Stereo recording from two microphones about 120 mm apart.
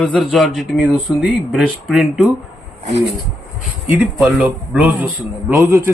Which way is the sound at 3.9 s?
10° right (ahead or behind).